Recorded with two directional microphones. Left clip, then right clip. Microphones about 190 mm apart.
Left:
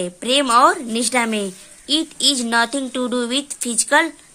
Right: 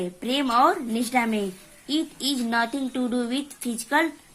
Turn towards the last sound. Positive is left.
turn(degrees=30)  # may be behind; listen again after turning